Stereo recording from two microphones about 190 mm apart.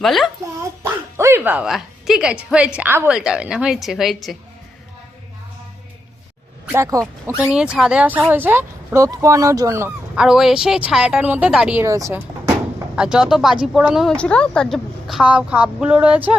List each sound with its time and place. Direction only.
0.0 s speech: centre (ahead or behind)
0.8 s a woman's voice: 15° right (ahead or behind)
6.7 s speech: 15° right (ahead or behind)
13.0 s speech: 5° right (ahead or behind)